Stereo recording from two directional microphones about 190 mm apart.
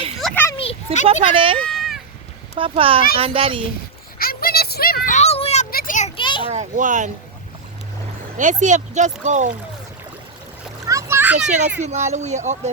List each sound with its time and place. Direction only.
0.2 s children playing: centre (ahead or behind)
0.5 s a sound: 30° left (ahead or behind)
1.2 s speech: 30° right (ahead or behind)
1.7 s a sound: centre (ahead or behind)
2.6 s speech: 30° right (ahead or behind)
4.2 s a sound: 50° left (ahead or behind); by 5.6 s 35° left (ahead or behind)
5.7 s children playing: 45° left (ahead or behind)
6.1 s children playing: 25° left (ahead or behind)
6.5 s a child's voice: 40° right (ahead or behind)
8.4 s speech: 40° right (ahead or behind)
10.8 s splash: 15° right (ahead or behind)
11.8 s speech: 35° right (ahead or behind)